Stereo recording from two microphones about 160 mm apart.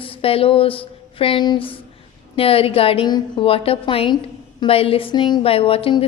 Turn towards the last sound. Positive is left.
turn(degrees=35)  # may be behind; listen again after turning